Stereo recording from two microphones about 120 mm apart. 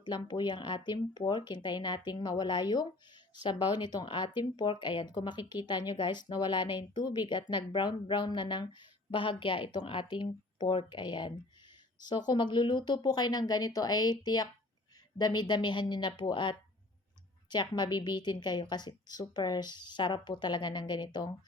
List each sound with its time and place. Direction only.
0.0 s speech: 40° left (ahead or behind)